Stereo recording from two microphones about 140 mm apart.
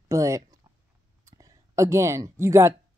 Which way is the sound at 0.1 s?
20° right (ahead or behind).